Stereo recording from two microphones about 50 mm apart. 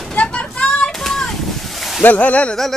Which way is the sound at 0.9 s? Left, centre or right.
Centre.